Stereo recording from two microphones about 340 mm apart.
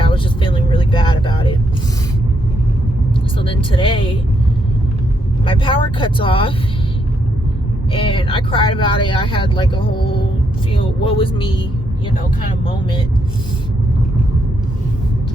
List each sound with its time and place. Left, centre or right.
0.0 s vehicle: centre
3.3 s vehicle: centre
5.5 s speech: centre
7.9 s speech: centre
12.6 s speech: centre